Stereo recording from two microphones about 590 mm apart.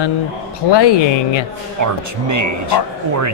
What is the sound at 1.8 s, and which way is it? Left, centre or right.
Speech, right.